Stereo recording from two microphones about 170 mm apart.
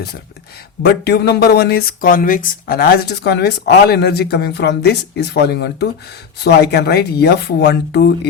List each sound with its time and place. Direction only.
0.8 s speech: 75° left (ahead or behind)